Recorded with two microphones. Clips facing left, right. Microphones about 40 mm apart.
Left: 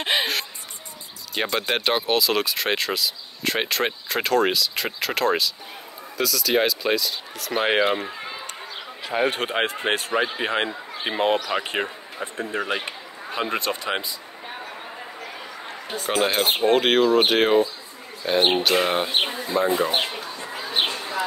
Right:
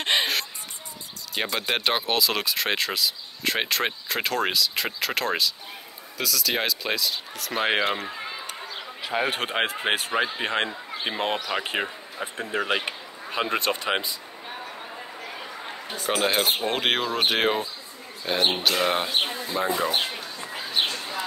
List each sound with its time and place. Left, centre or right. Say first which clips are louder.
0.0 s music: left 1 dB; centre
1.3 s speech: left 3 dB; centre
13.6 s speech: right 1 dB; right
16.1 s speech: left 2 dB; centre
19.6 s speech: left 3 dB; centre
20.1 s a sound: left 2 dB; centre
20.7 s bird: left 2 dB; left